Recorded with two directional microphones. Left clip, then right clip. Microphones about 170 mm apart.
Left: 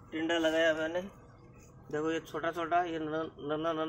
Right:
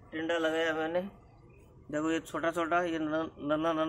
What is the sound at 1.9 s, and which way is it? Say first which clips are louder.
A man's voice: right 1 dB; 70° right (ahead or behind).